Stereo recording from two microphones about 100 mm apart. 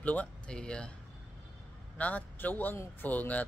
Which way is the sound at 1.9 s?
15° left (ahead or behind).